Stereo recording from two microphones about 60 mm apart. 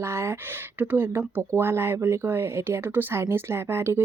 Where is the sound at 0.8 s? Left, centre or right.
Right.